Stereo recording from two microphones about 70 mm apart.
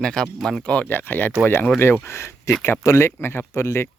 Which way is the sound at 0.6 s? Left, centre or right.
Centre.